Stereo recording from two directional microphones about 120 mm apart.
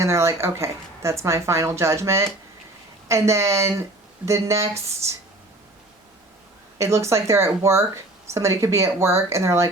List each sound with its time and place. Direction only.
0.0 s speech: 25° right (ahead or behind)
6.7 s speech: 25° right (ahead or behind)